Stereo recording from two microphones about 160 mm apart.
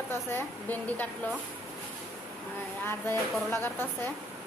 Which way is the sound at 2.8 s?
15° left (ahead or behind).